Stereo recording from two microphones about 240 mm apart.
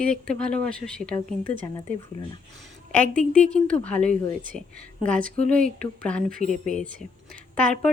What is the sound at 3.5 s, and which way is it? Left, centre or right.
Speech, centre.